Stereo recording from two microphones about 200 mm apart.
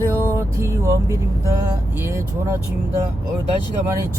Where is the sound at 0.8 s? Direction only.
15° right (ahead or behind).